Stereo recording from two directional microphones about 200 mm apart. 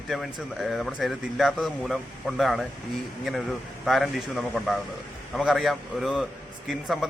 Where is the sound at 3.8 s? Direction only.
Centre (ahead or behind).